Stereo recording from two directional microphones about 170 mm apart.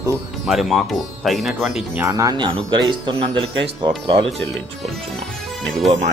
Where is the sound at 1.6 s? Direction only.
10° right (ahead or behind); by 4.3 s 30° right (ahead or behind).